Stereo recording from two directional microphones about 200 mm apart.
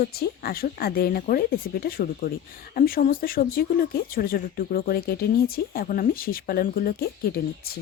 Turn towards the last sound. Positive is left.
turn(degrees=50)  # may be behind; listen again after turning